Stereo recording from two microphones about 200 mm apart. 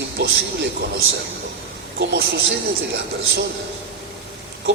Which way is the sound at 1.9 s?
55° right (ahead or behind).